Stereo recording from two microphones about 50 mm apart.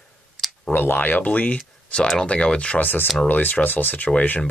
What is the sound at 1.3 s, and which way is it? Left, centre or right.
Speech, left.